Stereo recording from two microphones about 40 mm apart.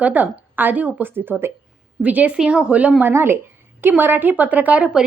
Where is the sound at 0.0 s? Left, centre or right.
Right.